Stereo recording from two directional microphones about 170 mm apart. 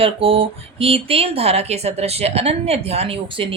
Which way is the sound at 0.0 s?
30° right (ahead or behind).